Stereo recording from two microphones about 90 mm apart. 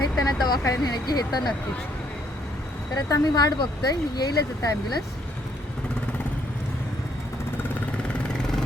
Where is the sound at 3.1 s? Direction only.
45° left (ahead or behind).